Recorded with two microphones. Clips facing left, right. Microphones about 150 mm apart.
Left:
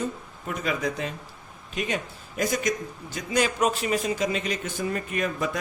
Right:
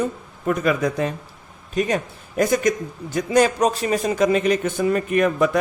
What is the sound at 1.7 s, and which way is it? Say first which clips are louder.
A man's voice: right 8 dB; 40° right (ahead or behind).